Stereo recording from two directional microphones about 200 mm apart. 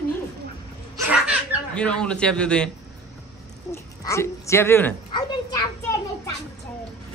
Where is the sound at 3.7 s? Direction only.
15° left (ahead or behind).